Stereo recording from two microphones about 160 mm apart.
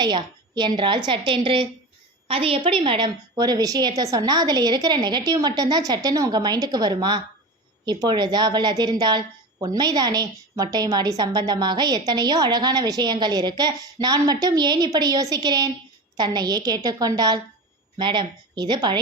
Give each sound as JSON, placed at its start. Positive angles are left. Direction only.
{"t": 0.0, "sound": "a woman's voice", "side_deg": -25}